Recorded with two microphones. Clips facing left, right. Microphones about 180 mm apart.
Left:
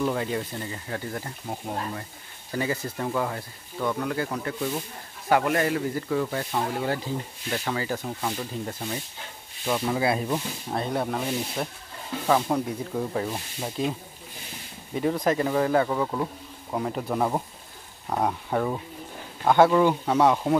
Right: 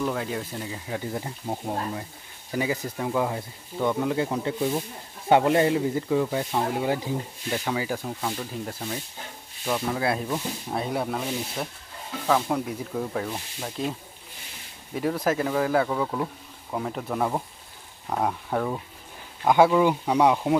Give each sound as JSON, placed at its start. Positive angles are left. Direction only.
{"t": 0.0, "sound": "speech", "side_deg": 0}
{"t": 10.7, "sound": "speech", "side_deg": -5}
{"t": 15.0, "sound": "speech", "side_deg": -5}
{"t": 19.4, "sound": "speech", "side_deg": -10}